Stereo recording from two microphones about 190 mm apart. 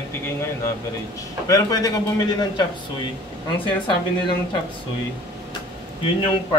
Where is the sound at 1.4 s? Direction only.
20° left (ahead or behind).